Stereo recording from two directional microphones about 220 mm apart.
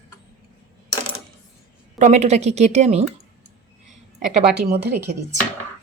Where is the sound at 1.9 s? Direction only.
30° right (ahead or behind).